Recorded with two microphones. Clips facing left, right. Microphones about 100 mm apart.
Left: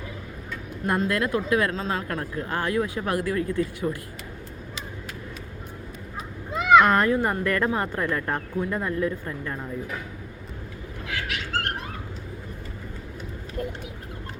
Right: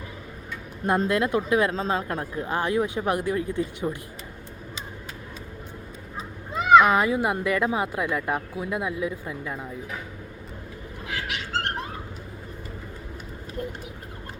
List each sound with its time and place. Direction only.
0.9 s speech: 20° right (ahead or behind)
6.7 s speech: 5° right (ahead or behind)
11.1 s a sound: 30° right (ahead or behind)